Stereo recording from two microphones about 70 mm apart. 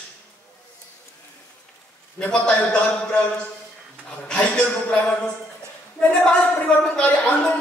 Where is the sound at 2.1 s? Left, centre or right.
Centre.